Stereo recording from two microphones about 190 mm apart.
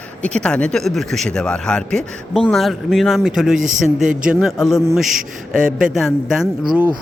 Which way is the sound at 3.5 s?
40° right (ahead or behind).